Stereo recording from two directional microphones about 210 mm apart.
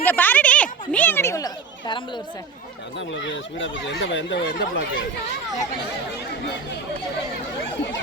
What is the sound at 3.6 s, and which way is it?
Speech, 60° left (ahead or behind).